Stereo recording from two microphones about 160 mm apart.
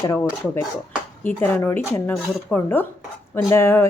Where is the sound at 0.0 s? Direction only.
20° left (ahead or behind).